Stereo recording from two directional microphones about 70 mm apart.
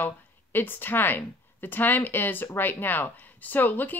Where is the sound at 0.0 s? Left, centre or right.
Left.